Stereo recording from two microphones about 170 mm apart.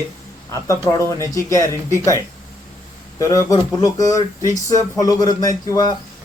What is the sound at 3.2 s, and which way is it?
A man's voice, 20° left (ahead or behind).